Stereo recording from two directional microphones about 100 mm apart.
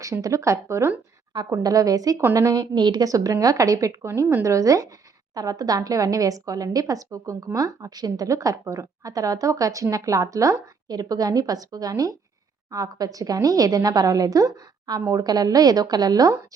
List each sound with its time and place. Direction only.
0.0 s a woman's voice: 35° right (ahead or behind)